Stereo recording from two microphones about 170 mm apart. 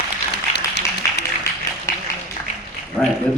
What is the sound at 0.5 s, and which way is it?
Applause, 75° left (ahead or behind).